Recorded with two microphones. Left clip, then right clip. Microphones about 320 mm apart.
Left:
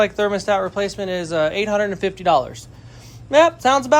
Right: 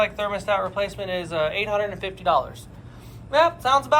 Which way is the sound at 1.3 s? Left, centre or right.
Left.